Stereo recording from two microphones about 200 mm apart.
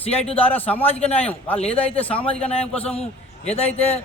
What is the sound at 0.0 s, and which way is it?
Speech, 30° left (ahead or behind).